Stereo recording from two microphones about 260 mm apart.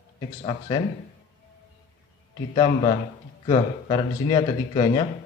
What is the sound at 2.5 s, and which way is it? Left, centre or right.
Speech, centre.